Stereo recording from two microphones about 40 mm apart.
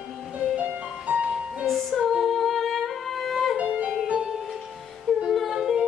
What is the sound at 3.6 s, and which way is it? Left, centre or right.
Music, right.